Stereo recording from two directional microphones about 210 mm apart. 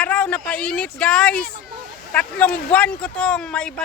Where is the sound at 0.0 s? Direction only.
5° left (ahead or behind).